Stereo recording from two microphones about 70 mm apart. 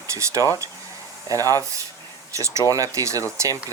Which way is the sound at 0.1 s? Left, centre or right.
Right.